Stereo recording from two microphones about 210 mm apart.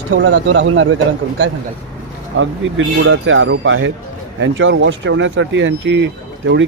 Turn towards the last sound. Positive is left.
turn(degrees=-60)  # may be behind; listen again after turning